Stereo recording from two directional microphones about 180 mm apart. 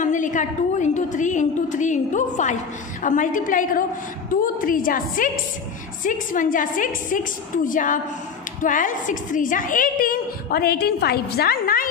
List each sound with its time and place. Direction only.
0.0 s a woman's voice: 45° left (ahead or behind)